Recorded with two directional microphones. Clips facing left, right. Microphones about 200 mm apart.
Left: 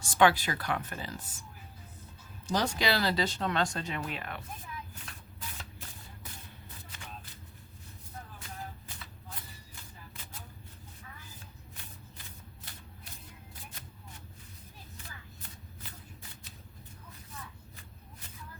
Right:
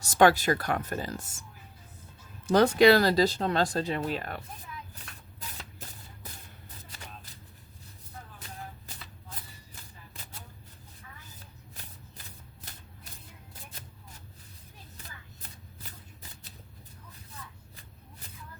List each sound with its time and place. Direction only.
0.0 s speech: 40° right (ahead or behind)
2.5 s speech: 55° right (ahead or behind); by 4.4 s 40° right (ahead or behind)